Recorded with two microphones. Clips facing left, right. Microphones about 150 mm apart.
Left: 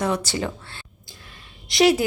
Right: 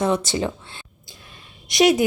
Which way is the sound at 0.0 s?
20° right (ahead or behind).